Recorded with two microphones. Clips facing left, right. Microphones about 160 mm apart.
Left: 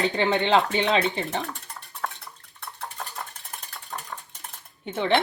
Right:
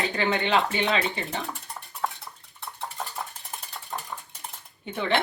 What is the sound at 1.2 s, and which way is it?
Speech, centre (ahead or behind).